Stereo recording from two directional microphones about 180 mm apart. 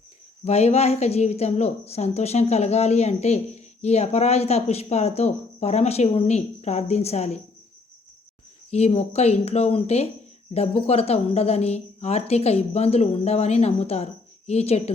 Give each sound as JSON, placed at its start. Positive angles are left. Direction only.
{"t": 0.4, "sound": "speech", "side_deg": 35}
{"t": 8.7, "sound": "speech", "side_deg": 35}